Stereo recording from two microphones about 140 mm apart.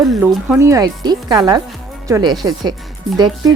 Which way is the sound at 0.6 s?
25° right (ahead or behind).